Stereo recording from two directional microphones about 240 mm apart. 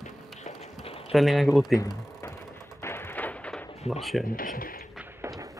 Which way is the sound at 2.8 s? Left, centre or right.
Centre.